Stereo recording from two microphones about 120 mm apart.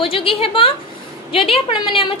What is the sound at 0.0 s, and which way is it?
A woman's voice, 50° left (ahead or behind).